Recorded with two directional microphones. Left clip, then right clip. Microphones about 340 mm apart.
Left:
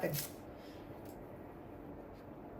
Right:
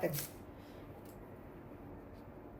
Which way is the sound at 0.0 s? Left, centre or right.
Centre.